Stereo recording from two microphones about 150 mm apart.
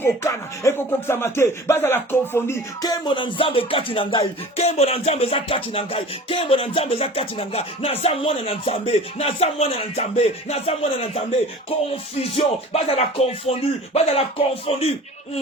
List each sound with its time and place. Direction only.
0.0 s speech: 15° left (ahead or behind); by 4.2 s 35° left (ahead or behind)
4.5 s music: 45° left (ahead or behind)
12.2 s speech: 40° left (ahead or behind)